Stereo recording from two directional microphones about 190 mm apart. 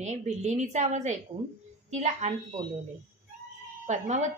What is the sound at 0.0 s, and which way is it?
A woman's voice, 35° right (ahead or behind).